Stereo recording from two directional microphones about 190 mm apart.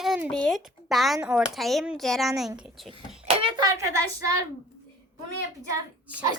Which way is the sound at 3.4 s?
20° right (ahead or behind).